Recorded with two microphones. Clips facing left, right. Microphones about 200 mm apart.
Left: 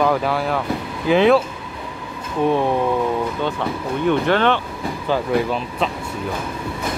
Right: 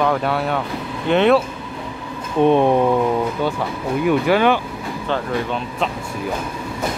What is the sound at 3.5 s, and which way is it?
Speech, 5° right (ahead or behind).